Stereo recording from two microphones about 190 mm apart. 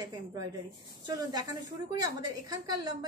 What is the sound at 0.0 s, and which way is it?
A woman's voice, 20° right (ahead or behind).